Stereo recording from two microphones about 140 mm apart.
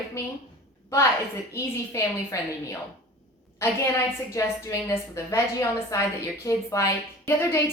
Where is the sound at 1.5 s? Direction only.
20° left (ahead or behind).